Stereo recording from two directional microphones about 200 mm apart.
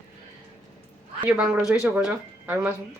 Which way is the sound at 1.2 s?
5° right (ahead or behind).